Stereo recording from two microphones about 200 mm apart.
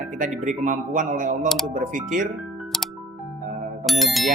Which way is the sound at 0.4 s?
40° right (ahead or behind).